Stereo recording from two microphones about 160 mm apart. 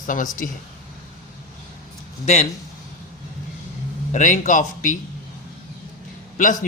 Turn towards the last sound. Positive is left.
turn(degrees=55)  # may be behind; listen again after turning